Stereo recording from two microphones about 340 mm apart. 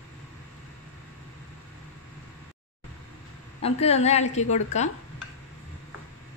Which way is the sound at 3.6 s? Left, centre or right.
Centre.